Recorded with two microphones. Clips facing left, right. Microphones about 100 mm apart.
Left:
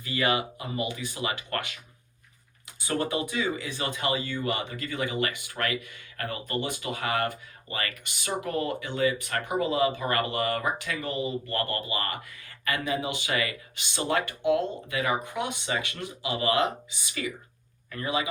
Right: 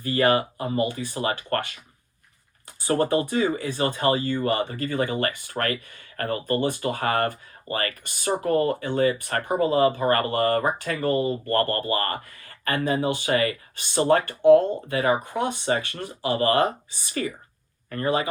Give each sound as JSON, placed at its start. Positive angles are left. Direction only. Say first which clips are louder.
{"t": 0.0, "sound": "speech", "louder": "right 6 dB", "side_deg": -45}
{"t": 2.8, "sound": "speech", "louder": "right 7 dB", "side_deg": -45}